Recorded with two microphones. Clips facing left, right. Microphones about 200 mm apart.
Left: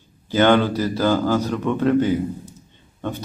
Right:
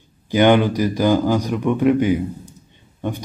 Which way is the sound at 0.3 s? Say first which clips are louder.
Right 2 dB; 15° right (ahead or behind).